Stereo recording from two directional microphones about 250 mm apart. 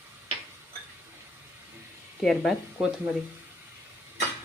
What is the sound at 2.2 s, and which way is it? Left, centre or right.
Speech, centre.